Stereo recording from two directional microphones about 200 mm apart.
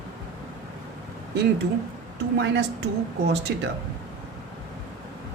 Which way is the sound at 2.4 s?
60° right (ahead or behind).